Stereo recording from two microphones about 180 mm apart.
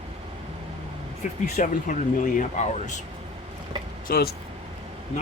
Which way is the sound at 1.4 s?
45° left (ahead or behind).